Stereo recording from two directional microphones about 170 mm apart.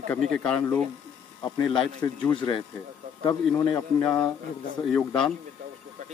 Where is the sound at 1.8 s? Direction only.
5° left (ahead or behind).